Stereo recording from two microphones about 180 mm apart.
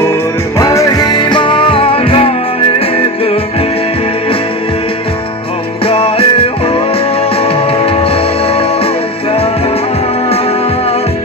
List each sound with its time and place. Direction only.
0.6 s music: 20° left (ahead or behind)
5.9 s music: 30° left (ahead or behind)